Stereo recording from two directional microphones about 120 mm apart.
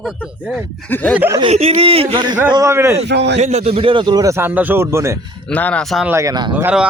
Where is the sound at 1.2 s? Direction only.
20° right (ahead or behind).